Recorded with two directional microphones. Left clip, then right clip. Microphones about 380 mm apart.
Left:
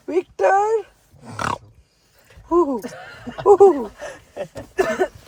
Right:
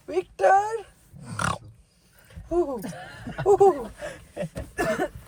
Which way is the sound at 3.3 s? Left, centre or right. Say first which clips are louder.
Left 7 dB; left.